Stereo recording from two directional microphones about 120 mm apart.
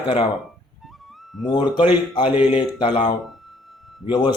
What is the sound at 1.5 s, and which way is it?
Speech, 40° left (ahead or behind).